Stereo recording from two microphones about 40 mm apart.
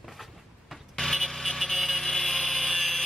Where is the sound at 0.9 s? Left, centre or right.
Centre.